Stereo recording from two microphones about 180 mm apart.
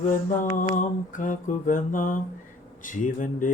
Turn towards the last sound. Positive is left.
turn(degrees=45)  # may be behind; listen again after turning